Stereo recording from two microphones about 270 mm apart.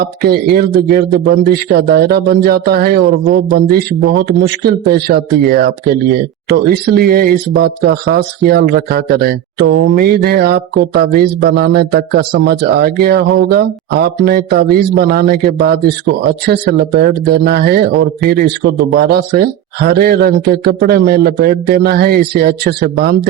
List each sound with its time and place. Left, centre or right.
0.0 s speech: right